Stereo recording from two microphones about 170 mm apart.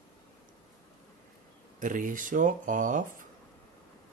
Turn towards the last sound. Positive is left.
turn(degrees=-50)  # may be behind; listen again after turning